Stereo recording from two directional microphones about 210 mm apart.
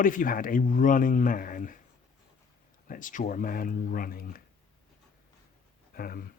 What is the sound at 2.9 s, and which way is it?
Speech, 40° left (ahead or behind).